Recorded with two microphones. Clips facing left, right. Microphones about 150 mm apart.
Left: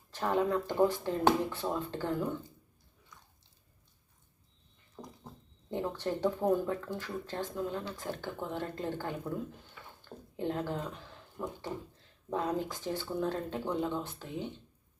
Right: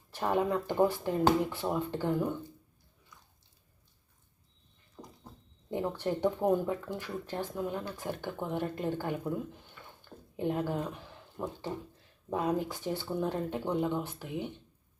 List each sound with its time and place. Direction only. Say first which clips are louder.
0.1 s speech: even; 15° right (ahead or behind)
5.7 s speech: right 2 dB; 15° right (ahead or behind)